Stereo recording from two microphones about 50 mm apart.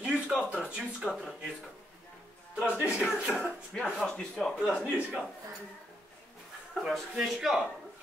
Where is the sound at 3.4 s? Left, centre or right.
Centre.